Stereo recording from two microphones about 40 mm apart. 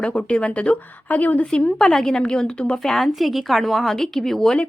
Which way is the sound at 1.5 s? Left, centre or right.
Left.